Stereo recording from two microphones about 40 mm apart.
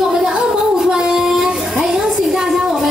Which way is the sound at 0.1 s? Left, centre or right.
Centre.